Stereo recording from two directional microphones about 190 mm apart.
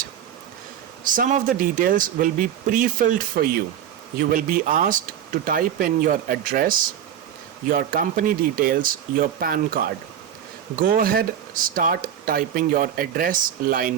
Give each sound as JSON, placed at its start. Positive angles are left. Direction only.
{"t": 1.0, "sound": "speech", "side_deg": -45}